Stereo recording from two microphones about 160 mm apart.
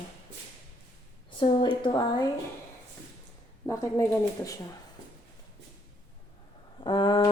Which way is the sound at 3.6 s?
15° left (ahead or behind).